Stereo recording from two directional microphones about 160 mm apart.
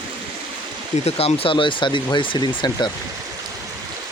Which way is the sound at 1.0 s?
40° left (ahead or behind).